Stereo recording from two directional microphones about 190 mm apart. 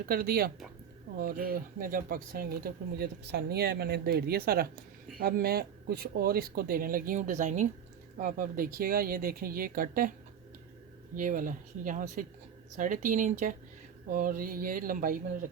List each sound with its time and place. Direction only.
0.0 s speech: 50° right (ahead or behind)